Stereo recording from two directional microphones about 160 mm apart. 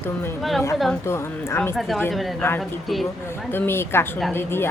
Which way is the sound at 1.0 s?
15° left (ahead or behind).